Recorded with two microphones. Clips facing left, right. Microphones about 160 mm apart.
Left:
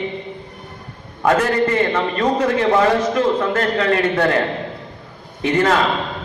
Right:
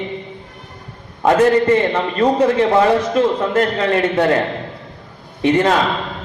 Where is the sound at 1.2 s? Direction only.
25° right (ahead or behind).